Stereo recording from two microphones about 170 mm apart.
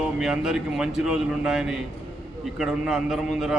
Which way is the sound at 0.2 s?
5° right (ahead or behind).